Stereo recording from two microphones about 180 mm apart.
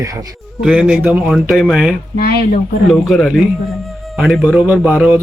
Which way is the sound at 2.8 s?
Centre (ahead or behind).